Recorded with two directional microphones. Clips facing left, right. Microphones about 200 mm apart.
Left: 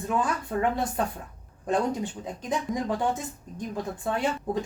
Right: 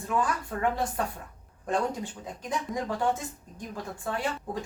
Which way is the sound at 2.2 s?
20° left (ahead or behind).